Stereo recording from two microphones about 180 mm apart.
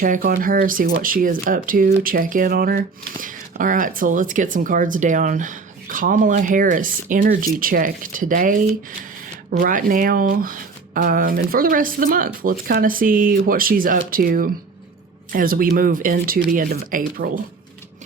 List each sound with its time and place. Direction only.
0.0 s speech: 50° right (ahead or behind)